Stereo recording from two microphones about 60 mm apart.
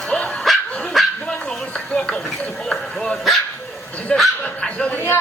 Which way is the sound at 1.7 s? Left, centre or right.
Centre.